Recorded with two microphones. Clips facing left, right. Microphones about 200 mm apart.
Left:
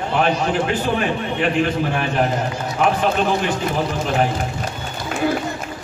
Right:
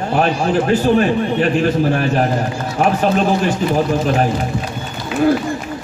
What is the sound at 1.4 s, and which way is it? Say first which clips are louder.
A man's voice: right 1 dB; 40° right (ahead or behind).